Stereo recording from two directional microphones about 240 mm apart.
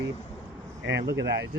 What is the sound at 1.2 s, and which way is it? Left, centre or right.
Speech, right.